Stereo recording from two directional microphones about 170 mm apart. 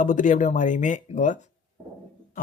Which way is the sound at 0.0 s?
50° left (ahead or behind).